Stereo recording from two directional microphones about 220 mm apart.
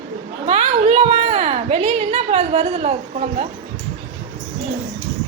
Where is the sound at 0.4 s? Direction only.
30° right (ahead or behind).